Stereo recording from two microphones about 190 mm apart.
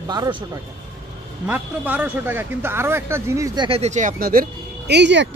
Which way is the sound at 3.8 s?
40° right (ahead or behind).